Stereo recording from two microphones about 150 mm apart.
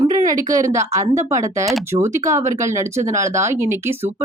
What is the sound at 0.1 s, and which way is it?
Speech, 20° right (ahead or behind).